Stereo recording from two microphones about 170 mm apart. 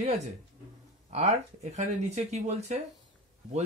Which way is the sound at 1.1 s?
45° right (ahead or behind).